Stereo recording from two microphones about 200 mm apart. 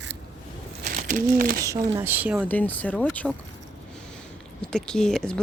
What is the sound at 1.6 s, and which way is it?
Speech, 15° right (ahead or behind).